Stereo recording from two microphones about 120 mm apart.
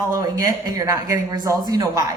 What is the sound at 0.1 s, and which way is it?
A woman's voice, 30° right (ahead or behind).